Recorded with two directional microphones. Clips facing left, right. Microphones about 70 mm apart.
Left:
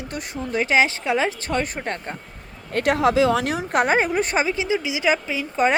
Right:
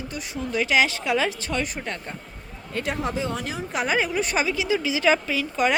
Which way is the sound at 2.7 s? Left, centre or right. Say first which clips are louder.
Left 9 dB; left.